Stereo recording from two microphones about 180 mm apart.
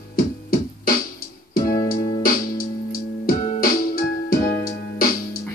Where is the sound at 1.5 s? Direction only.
50° left (ahead or behind).